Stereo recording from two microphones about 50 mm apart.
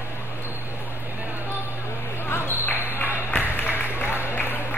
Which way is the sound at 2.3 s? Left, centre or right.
Left.